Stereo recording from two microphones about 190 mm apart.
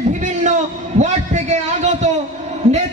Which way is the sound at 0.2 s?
40° right (ahead or behind).